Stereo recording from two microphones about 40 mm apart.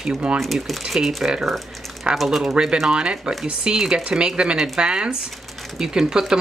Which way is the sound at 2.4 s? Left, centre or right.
Centre.